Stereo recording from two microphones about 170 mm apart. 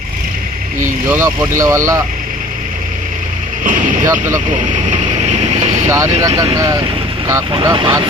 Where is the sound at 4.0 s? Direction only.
15° right (ahead or behind).